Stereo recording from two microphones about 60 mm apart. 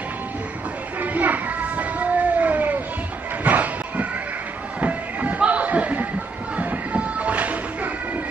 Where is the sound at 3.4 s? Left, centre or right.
Right.